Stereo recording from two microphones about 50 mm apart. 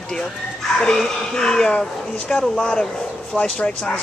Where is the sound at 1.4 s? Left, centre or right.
Centre.